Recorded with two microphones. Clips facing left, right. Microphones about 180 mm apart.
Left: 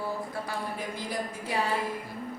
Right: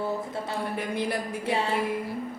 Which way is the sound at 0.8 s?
65° right (ahead or behind).